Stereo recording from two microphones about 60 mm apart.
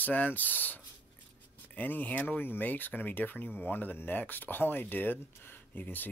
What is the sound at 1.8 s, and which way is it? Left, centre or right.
Speech, left.